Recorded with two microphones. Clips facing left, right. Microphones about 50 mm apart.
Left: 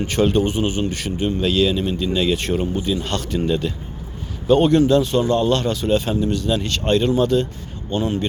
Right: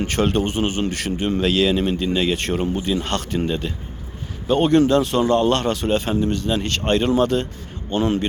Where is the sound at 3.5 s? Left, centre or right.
Right.